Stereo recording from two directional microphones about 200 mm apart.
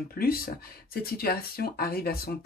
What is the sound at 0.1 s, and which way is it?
Speech, 50° left (ahead or behind).